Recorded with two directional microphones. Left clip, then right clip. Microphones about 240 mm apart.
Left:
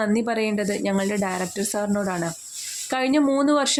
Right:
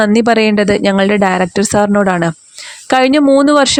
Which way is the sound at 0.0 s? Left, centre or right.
Right.